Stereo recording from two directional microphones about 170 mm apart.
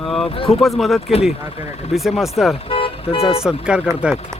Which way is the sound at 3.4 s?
5° right (ahead or behind).